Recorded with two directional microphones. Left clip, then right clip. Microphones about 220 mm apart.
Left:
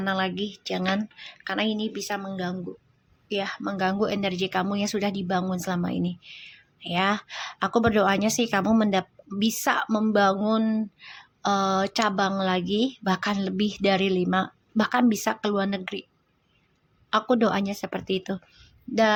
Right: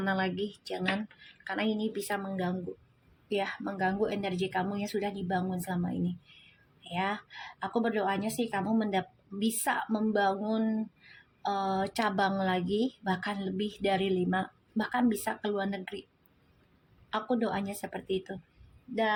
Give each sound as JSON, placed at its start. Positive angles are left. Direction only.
{"t": 0.0, "sound": "a woman's voice", "side_deg": 10}
{"t": 17.1, "sound": "a woman's voice", "side_deg": 25}